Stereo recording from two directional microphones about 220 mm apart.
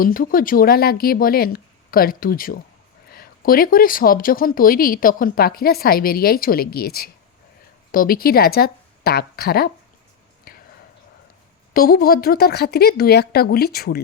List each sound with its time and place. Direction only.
0.0 s speech: 40° left (ahead or behind)
10.5 s a sound: 40° left (ahead or behind)
11.7 s speech: 40° left (ahead or behind)